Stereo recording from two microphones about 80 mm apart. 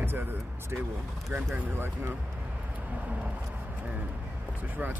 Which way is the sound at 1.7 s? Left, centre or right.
Right.